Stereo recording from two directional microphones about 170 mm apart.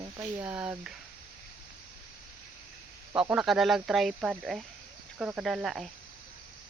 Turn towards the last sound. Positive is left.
turn(degrees=0)  # may be behind; listen again after turning